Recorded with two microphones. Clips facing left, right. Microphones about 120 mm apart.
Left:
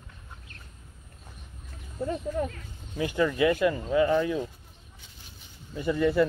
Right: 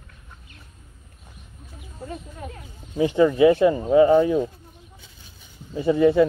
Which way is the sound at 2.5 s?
20° right (ahead or behind).